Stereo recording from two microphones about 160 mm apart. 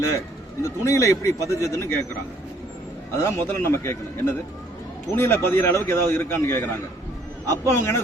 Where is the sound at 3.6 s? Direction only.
15° left (ahead or behind).